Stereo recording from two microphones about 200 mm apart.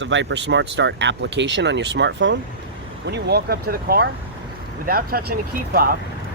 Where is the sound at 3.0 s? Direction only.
55° right (ahead or behind).